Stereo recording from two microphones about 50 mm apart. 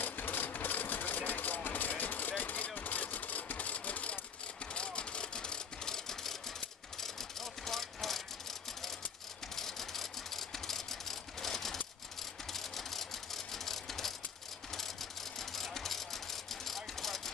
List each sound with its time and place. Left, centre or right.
0.0 s vehicle: left; by 8.2 s centre
9.6 s vehicle: centre